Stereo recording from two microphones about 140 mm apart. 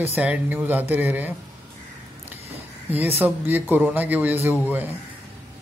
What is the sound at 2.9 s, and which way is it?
Speech, 15° right (ahead or behind).